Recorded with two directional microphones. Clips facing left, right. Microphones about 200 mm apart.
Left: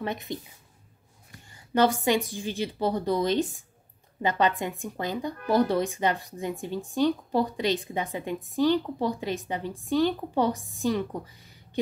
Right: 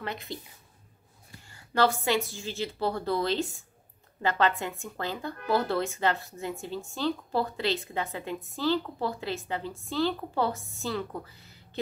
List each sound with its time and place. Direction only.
0.0 s a woman's voice: 20° left (ahead or behind)
1.5 s speech: 20° left (ahead or behind)